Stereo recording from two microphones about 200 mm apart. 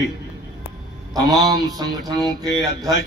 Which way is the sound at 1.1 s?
20° right (ahead or behind).